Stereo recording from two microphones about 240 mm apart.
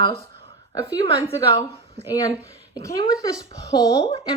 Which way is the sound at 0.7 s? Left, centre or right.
Centre.